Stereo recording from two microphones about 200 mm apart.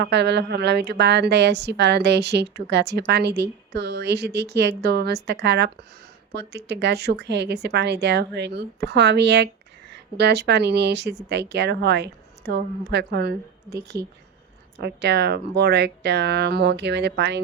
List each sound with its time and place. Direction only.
0.0 s a woman's voice: 60° right (ahead or behind)